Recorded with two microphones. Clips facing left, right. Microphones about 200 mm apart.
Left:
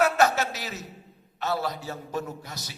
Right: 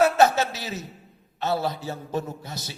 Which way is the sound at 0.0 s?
25° right (ahead or behind).